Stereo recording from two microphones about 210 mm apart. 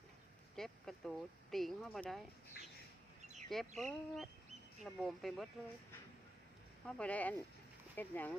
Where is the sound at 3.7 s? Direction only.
Centre (ahead or behind).